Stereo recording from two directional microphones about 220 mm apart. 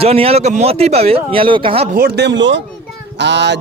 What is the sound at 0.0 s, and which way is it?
Speech, 25° right (ahead or behind).